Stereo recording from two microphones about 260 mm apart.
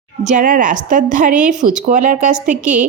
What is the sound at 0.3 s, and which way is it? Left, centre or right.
A woman's voice, right.